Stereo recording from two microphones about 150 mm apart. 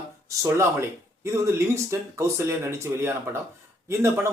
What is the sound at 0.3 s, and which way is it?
A man's voice, 20° right (ahead or behind).